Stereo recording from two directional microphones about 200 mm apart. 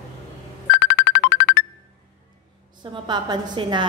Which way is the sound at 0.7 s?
65° left (ahead or behind).